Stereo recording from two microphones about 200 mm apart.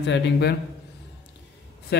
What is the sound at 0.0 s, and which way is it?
Speech, 55° left (ahead or behind).